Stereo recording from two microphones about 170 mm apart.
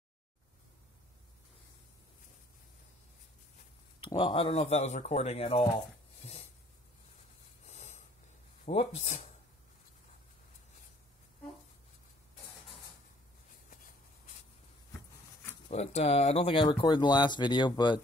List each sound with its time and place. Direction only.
4.1 s speech: 30° left (ahead or behind)
7.6 s snort: 45° left (ahead or behind)
8.6 s speech: 40° left (ahead or behind)
15.7 s speech: 40° left (ahead or behind)